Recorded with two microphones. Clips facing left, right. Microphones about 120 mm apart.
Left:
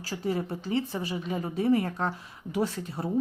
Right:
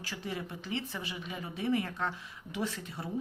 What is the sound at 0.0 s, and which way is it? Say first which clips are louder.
A woman's voice: left 9 dB; 40° left (ahead or behind).